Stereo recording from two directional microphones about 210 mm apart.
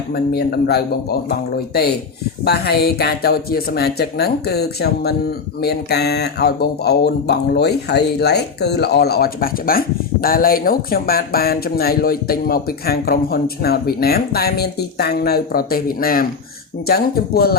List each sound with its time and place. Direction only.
0.1 s speech: 50° left (ahead or behind)